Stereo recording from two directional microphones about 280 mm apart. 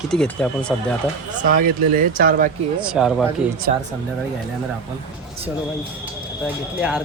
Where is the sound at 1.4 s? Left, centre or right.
Right.